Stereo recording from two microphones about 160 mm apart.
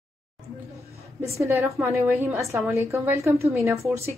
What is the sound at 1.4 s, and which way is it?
A woman's voice, 15° right (ahead or behind).